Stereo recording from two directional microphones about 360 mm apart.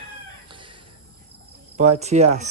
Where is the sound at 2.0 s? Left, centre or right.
Centre.